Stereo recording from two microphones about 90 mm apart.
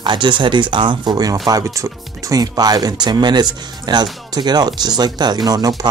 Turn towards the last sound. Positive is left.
turn(degrees=-45)  # may be behind; listen again after turning